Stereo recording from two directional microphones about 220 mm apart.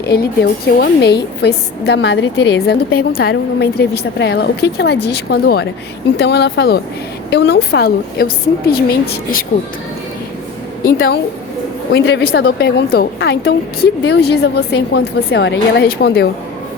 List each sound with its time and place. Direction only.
0.0 s a woman's voice: 45° left (ahead or behind)
10.9 s a woman's voice: 45° left (ahead or behind)